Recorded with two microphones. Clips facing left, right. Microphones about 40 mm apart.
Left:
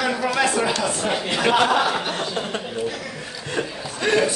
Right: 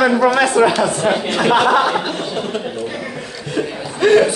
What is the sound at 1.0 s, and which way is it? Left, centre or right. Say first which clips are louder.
A man's voice: right 4 dB; right.